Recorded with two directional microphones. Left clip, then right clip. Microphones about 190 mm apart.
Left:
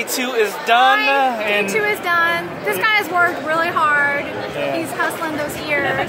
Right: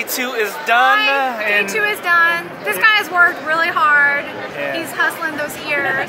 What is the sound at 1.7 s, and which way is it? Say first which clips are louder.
Speech: right 2 dB; 15° left (ahead or behind).